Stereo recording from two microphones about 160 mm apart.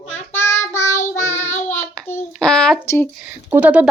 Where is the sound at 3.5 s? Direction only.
10° right (ahead or behind).